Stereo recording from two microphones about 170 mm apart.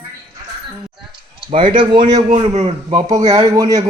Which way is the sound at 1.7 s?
25° right (ahead or behind).